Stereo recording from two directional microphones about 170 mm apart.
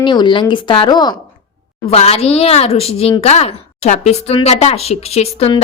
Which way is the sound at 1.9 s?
35° left (ahead or behind).